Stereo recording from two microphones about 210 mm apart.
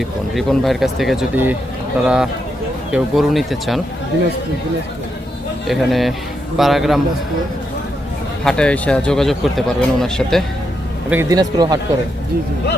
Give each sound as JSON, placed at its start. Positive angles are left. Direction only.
{"t": 0.0, "sound": "speech", "side_deg": 0}
{"t": 5.6, "sound": "speech", "side_deg": 0}
{"t": 8.4, "sound": "speech", "side_deg": 5}
{"t": 11.1, "sound": "a man's voice", "side_deg": -15}